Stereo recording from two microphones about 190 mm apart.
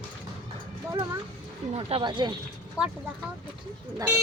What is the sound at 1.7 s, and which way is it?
Speech, 30° right (ahead or behind).